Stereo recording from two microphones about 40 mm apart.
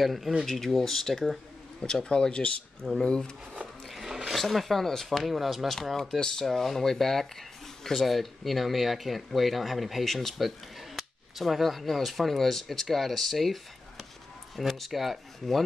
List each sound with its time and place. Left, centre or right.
0.0 s speech: centre
0.5 s speech: centre
2.0 s speech: left
3.9 s a sound: centre
4.3 s speech: centre
5.9 s speech: centre